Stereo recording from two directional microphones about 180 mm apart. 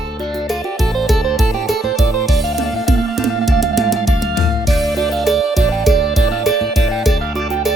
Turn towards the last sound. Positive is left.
turn(degrees=0)  # may be behind; listen again after turning